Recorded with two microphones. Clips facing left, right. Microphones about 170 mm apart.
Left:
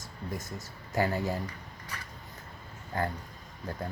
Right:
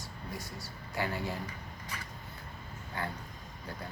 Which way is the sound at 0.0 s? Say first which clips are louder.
Left 4 dB; 45° left (ahead or behind).